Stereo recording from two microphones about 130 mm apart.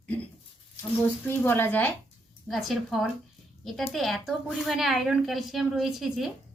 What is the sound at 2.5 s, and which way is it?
A woman's voice, centre (ahead or behind).